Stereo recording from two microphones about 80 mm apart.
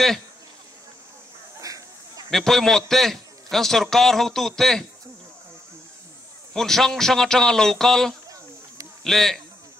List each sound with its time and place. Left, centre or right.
1.6 s a sound: right
2.3 s a man's voice: centre
6.5 s a man's voice: centre